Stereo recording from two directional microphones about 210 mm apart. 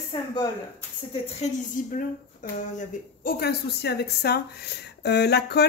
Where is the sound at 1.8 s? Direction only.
40° left (ahead or behind).